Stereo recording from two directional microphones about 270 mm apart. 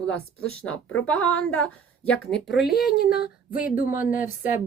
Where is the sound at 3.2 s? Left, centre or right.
Centre.